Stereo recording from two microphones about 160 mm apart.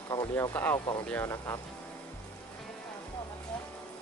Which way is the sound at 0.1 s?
25° left (ahead or behind).